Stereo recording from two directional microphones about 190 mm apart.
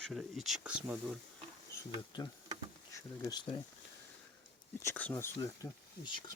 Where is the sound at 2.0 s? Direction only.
25° left (ahead or behind).